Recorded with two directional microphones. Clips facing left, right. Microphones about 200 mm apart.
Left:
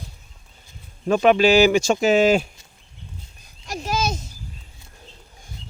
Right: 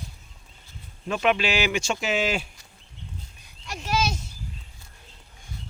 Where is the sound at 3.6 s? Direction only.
40° left (ahead or behind).